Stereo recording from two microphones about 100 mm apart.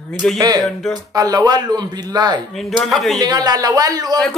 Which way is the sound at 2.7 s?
Centre (ahead or behind).